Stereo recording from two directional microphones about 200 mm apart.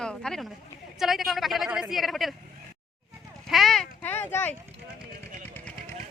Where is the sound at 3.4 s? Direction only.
Centre (ahead or behind).